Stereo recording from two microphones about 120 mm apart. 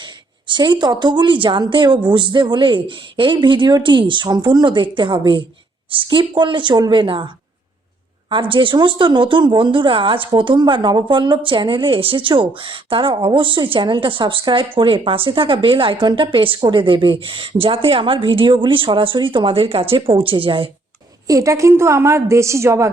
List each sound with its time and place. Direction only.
0.0 s a woman's voice: 40° right (ahead or behind)
8.3 s speech: 45° right (ahead or behind)
21.2 s a woman's voice: 30° right (ahead or behind)